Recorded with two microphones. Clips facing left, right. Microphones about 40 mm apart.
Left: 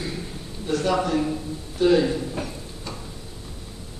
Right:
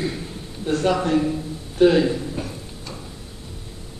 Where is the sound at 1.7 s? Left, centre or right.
Right.